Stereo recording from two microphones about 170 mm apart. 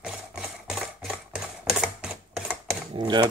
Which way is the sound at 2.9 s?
25° right (ahead or behind).